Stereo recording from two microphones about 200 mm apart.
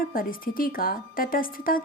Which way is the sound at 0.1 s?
45° left (ahead or behind).